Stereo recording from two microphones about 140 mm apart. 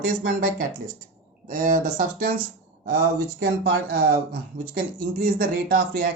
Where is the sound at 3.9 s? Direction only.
90° right.